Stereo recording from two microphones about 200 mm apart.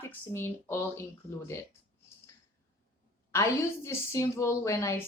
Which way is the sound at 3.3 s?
15° left (ahead or behind).